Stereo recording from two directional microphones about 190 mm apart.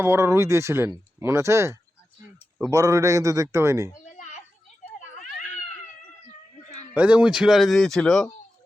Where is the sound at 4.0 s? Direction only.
40° left (ahead or behind).